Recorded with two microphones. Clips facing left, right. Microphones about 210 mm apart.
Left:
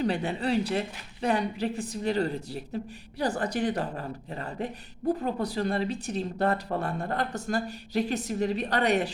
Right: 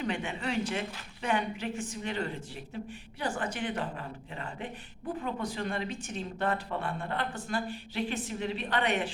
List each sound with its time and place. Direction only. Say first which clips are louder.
0.0 s a woman's voice: left 6 dB; 35° left (ahead or behind)